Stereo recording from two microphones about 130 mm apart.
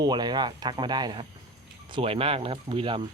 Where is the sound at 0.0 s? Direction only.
35° right (ahead or behind).